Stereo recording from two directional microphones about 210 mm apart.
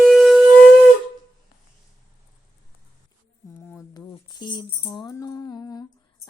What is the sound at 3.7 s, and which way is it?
Tambourine, 15° left (ahead or behind).